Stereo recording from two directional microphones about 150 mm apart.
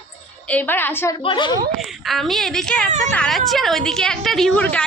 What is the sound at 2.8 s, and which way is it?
Speech, 55° right (ahead or behind).